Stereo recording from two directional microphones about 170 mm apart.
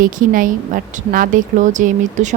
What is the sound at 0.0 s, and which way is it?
A woman's voice, 55° right (ahead or behind).